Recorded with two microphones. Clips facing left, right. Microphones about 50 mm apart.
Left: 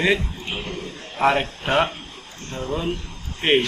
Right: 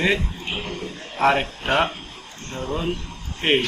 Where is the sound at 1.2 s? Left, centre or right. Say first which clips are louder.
Even; centre.